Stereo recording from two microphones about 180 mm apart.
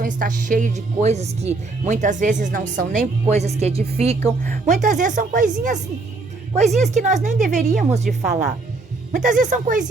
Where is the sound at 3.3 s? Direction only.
35° right (ahead or behind).